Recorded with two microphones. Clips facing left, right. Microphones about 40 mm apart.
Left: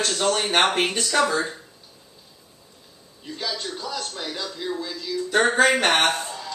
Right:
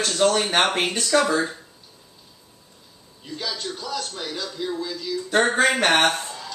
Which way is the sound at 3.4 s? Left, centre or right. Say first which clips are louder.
Left 1 dB; centre.